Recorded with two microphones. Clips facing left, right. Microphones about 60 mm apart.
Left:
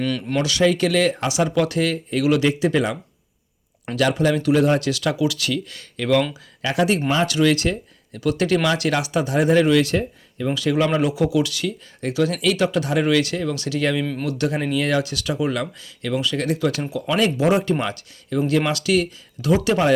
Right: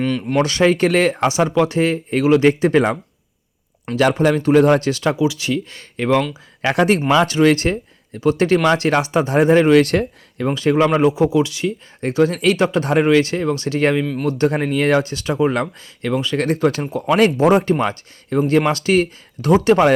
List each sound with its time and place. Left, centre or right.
0.0 s speech: centre
0.4 s speech: right
4.0 s speech: right
6.6 s speech: right
7.3 s speech: right
9.7 s speech: right
10.5 s speech: right
14.0 s speech: centre
14.3 s speech: right